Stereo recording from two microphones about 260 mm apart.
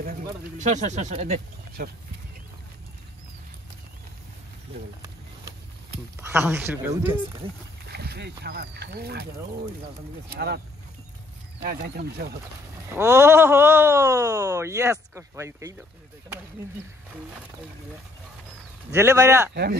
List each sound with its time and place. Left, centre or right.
0.0 s speech: right
6.1 s speech: centre
7.8 s speech: right
10.3 s speech: right
11.6 s speech: right
12.9 s speech: centre
18.9 s speech: centre
19.5 s speech: right